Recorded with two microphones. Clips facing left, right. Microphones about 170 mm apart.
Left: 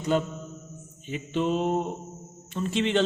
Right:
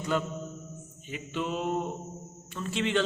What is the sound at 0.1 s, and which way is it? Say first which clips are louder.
A man's voice: left 3 dB; 20° left (ahead or behind).